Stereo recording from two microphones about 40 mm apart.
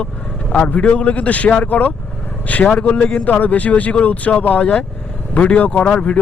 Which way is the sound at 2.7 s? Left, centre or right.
Left.